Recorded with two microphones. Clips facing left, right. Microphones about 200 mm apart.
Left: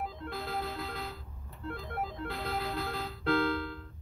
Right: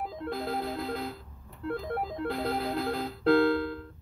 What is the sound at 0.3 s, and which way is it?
Music, 45° right (ahead or behind).